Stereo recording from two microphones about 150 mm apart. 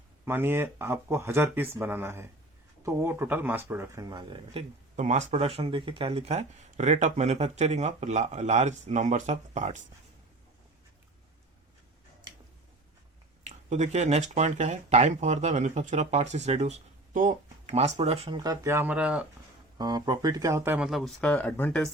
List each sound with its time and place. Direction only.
0.3 s speech: 15° right (ahead or behind); by 4.6 s 30° right (ahead or behind)
4.9 s speech: 50° right (ahead or behind)
13.7 s speech: 50° right (ahead or behind)
18.3 s speech: 25° right (ahead or behind)
19.8 s speech: 25° right (ahead or behind)
20.7 s speech: 5° right (ahead or behind)